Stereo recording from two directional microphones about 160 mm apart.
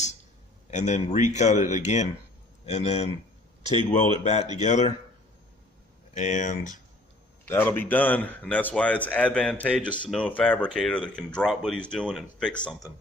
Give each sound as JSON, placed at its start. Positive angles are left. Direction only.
{"t": 0.7, "sound": "speech", "side_deg": 50}
{"t": 6.1, "sound": "speech", "side_deg": 50}
{"t": 7.4, "sound": "speech", "side_deg": 10}